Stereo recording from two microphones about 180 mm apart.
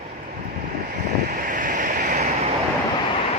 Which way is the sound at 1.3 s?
50° right (ahead or behind).